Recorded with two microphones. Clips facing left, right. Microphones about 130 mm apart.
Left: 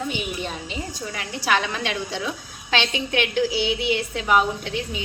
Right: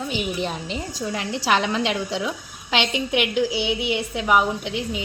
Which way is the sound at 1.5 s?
20° right (ahead or behind).